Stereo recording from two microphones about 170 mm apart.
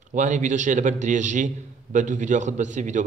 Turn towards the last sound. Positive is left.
turn(degrees=-45)  # may be behind; listen again after turning